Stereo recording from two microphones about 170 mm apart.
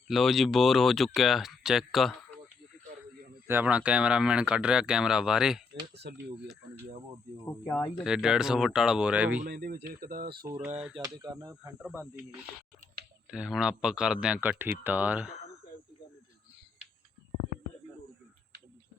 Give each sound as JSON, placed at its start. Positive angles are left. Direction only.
{"t": 0.1, "sound": "speech", "side_deg": 0}
{"t": 3.4, "sound": "speech", "side_deg": -10}
{"t": 6.0, "sound": "speech", "side_deg": -75}
{"t": 7.6, "sound": "speech", "side_deg": 10}
{"t": 7.9, "sound": "speech", "side_deg": -5}
{"t": 9.5, "sound": "speech", "side_deg": -65}
{"t": 10.9, "sound": "speech", "side_deg": -25}
{"t": 11.6, "sound": "speech", "side_deg": -10}